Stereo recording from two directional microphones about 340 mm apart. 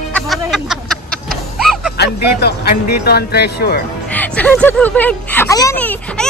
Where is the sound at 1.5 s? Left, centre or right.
Centre.